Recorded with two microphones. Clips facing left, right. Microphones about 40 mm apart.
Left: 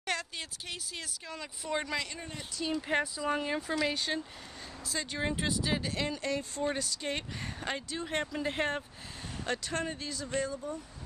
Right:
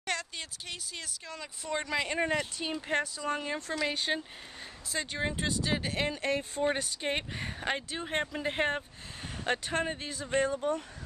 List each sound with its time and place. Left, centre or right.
0.0 s speech: centre
2.1 s speech: right
2.9 s speech: centre
3.9 s speech: centre
5.2 s speech: centre
5.8 s speech: right
9.4 s speech: right
10.5 s speech: right